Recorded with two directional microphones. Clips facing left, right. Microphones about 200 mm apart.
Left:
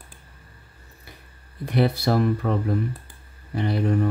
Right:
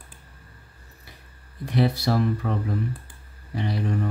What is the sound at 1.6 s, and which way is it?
Speech, 60° left (ahead or behind).